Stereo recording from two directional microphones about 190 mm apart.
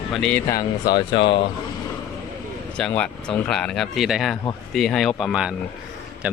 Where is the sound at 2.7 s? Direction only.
5° left (ahead or behind).